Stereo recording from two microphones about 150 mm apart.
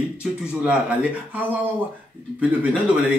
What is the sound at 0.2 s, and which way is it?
Speech, 5° right (ahead or behind).